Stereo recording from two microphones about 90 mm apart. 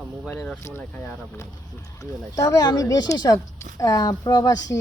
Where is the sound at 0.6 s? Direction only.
30° left (ahead or behind).